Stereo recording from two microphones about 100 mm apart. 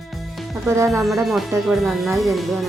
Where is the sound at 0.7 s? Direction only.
30° right (ahead or behind).